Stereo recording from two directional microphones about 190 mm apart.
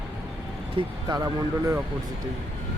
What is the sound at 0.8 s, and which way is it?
Speech, 20° right (ahead or behind).